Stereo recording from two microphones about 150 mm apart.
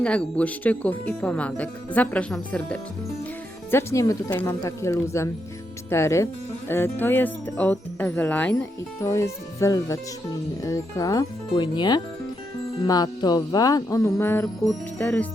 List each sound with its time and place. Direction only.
0.0 s speech: 5° left (ahead or behind)
3.7 s music: 15° left (ahead or behind)
4.3 s speech: 15° left (ahead or behind)
4.6 s music: 20° left (ahead or behind)
5.9 s speech: 20° left (ahead or behind)
10.6 s music: 20° left (ahead or behind)
14.9 s speech: 10° left (ahead or behind)